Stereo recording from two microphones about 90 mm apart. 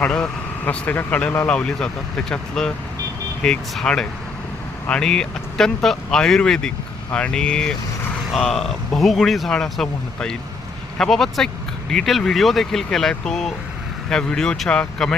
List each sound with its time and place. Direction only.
0.0 s speech: 10° left (ahead or behind)